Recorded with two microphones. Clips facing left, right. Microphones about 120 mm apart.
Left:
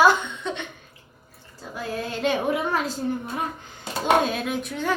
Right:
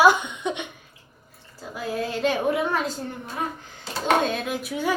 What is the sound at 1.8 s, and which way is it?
Speech, centre (ahead or behind).